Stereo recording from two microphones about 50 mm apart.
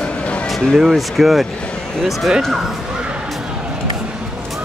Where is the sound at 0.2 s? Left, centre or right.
Left.